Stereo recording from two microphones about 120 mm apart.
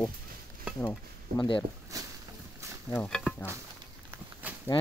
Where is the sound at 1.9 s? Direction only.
30° right (ahead or behind).